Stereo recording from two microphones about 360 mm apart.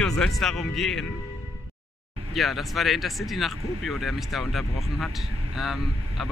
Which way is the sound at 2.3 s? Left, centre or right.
Centre.